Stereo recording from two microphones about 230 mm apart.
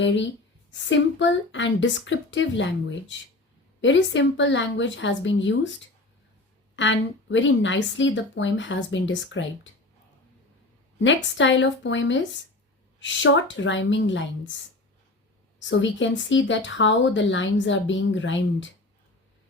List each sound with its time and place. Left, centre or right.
0.7 s speech: left
3.8 s speech: left
6.7 s speech: left
11.0 s speech: left
15.5 s speech: left